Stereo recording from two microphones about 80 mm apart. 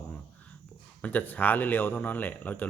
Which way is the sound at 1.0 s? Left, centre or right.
Centre.